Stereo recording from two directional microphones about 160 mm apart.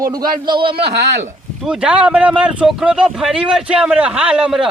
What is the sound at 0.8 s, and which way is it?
Speech, 90° right.